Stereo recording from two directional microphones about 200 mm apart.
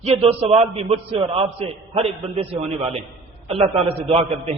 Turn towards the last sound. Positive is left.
turn(degrees=-30)  # may be behind; listen again after turning